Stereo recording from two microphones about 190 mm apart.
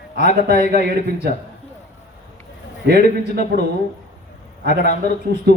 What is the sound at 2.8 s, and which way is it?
Speech, 55° right (ahead or behind).